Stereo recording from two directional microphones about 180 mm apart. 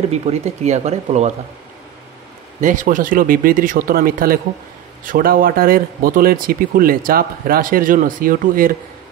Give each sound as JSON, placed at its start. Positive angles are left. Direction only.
{"t": 0.1, "sound": "speech", "side_deg": -40}
{"t": 2.6, "sound": "speech", "side_deg": -45}